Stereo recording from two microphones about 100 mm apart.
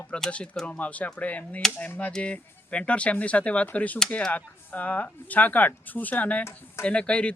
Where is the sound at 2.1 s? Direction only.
10° left (ahead or behind).